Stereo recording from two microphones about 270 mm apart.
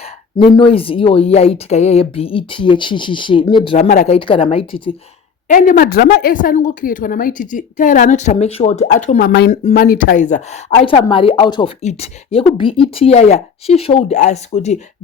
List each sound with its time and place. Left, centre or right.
0.3 s speech: centre
5.5 s speech: left